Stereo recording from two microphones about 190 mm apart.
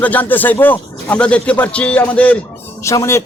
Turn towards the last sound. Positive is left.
turn(degrees=15)  # may be behind; listen again after turning